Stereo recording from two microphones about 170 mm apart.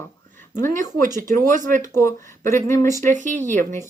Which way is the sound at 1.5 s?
50° right (ahead or behind).